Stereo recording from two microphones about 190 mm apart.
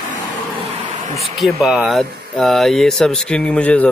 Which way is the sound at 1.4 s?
Centre (ahead or behind).